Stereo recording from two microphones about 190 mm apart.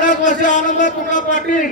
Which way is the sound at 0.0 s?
40° left (ahead or behind).